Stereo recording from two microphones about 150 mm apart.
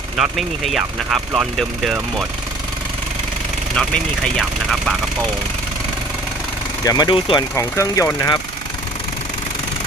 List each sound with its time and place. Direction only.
0.2 s speech: centre (ahead or behind)
3.8 s speech: 5° left (ahead or behind)
6.8 s speech: 25° left (ahead or behind)
7.5 s speech: 20° left (ahead or behind)